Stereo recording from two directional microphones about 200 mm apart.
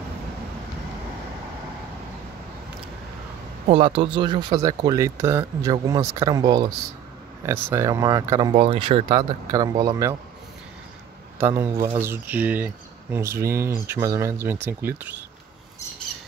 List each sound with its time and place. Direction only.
3.6 s speech: 30° right (ahead or behind)
11.3 s speech: 10° right (ahead or behind)